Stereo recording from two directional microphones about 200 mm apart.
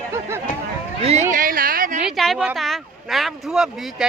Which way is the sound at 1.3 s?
45° right (ahead or behind).